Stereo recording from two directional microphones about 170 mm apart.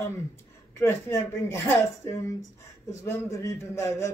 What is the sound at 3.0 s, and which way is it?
Speech, 15° left (ahead or behind).